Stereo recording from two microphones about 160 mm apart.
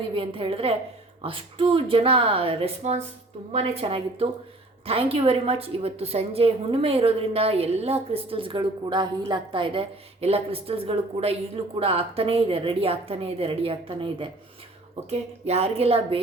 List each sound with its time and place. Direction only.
0.1 s a woman's voice: 35° right (ahead or behind)